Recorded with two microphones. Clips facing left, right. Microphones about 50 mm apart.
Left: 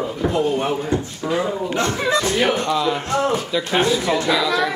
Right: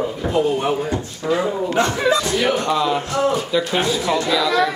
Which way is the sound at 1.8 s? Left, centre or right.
Right.